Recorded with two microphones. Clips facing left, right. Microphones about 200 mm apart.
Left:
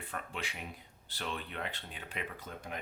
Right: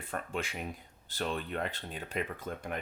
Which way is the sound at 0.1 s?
45° right (ahead or behind).